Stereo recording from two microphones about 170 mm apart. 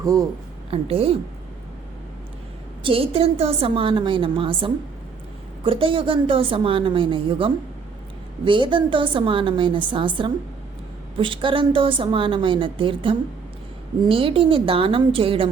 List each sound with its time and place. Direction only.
0.0 s a woman's voice: 20° right (ahead or behind)
0.7 s a woman's voice: 35° right (ahead or behind)
2.8 s a woman's voice: 35° right (ahead or behind)